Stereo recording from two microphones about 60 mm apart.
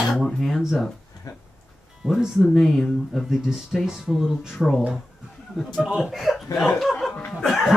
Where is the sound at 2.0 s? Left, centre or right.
Centre.